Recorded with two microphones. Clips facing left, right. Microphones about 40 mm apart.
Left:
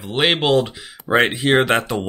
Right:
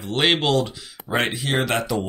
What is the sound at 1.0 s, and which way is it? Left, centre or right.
Speech, left.